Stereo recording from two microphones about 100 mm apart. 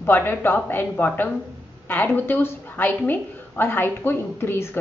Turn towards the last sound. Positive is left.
turn(degrees=25)  # may be behind; listen again after turning